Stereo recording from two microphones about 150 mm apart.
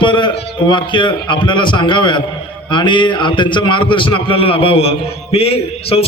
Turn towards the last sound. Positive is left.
turn(degrees=40)  # may be behind; listen again after turning